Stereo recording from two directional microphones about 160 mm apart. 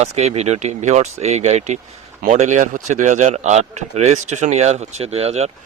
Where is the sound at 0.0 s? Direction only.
45° right (ahead or behind).